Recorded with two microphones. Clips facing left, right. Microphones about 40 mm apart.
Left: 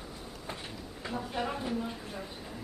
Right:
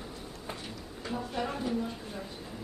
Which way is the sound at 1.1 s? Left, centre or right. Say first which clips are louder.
Even; centre.